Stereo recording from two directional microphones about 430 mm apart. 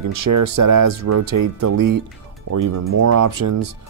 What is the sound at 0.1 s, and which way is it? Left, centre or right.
Speech, right.